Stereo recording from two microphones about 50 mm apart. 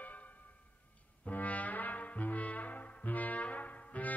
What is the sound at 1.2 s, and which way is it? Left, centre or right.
Brass instrument, left.